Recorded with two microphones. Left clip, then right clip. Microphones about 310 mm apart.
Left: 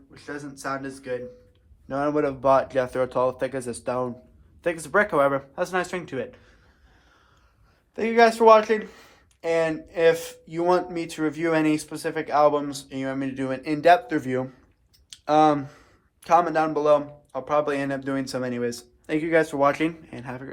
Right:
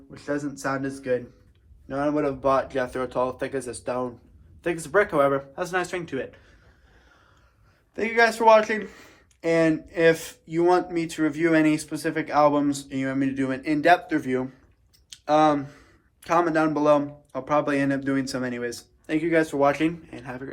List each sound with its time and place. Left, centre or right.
0.1 s speech: centre
1.9 s speech: left
7.9 s speech: centre